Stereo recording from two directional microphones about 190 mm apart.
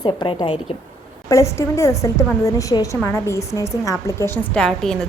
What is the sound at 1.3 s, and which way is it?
A woman's voice, 15° left (ahead or behind).